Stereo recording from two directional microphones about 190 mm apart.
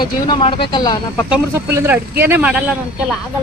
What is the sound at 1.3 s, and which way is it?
Speech, 10° right (ahead or behind).